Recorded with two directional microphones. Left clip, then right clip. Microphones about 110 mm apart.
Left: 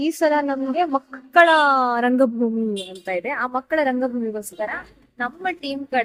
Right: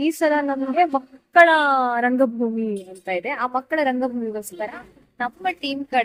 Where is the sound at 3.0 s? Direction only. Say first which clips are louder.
Even; 25° left (ahead or behind).